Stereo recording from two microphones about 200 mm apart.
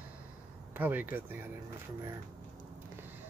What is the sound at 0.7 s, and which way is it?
Speech, 10° right (ahead or behind).